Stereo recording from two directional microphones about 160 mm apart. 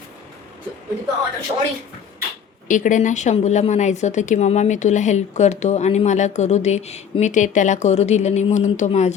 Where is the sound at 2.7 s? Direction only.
50° left (ahead or behind).